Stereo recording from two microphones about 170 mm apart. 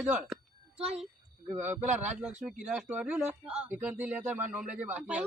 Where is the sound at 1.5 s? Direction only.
10° right (ahead or behind).